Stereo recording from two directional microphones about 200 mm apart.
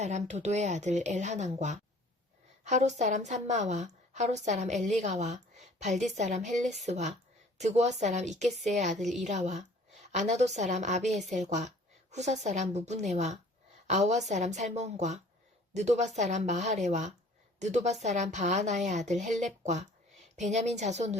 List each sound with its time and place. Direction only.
0.0 s a woman's voice: 35° right (ahead or behind)